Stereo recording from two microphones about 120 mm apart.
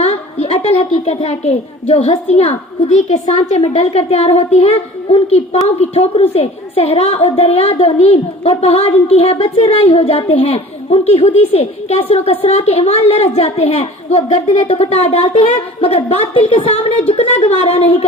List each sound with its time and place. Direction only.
0.0 s a woman's voice: 60° left (ahead or behind)